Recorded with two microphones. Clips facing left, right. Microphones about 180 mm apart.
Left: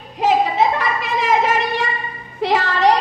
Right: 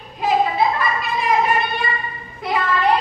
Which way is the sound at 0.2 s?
90° left.